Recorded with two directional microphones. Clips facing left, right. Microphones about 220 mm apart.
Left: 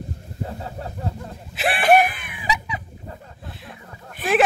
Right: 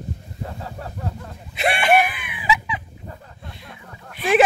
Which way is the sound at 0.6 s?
25° left (ahead or behind).